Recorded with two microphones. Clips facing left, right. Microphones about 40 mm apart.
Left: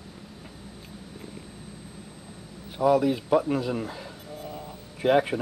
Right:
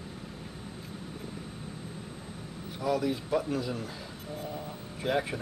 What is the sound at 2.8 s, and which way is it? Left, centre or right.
Speech, centre.